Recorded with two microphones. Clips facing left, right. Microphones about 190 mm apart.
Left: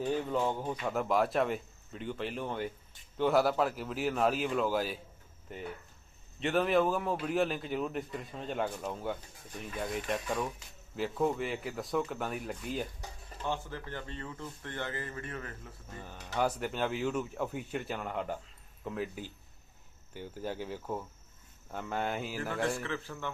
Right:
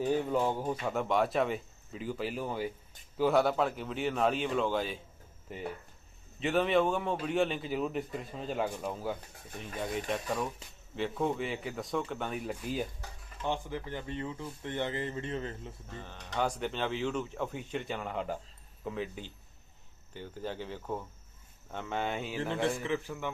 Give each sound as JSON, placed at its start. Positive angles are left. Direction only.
{"t": 0.3, "sound": "a man's voice", "side_deg": -10}
{"t": 13.4, "sound": "speech", "side_deg": -15}
{"t": 16.0, "sound": "a man's voice", "side_deg": 5}
{"t": 20.1, "sound": "cricket", "side_deg": 10}
{"t": 21.7, "sound": "a man's voice", "side_deg": 5}
{"t": 22.4, "sound": "a man's voice", "side_deg": -25}